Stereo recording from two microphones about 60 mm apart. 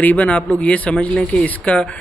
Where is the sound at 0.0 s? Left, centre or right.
Left.